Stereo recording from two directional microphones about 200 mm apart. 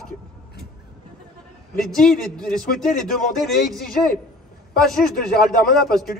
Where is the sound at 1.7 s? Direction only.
5° left (ahead or behind).